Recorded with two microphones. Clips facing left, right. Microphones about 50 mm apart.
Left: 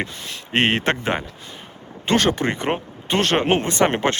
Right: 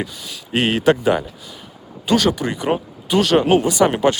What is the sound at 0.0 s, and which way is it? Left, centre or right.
Speech, left.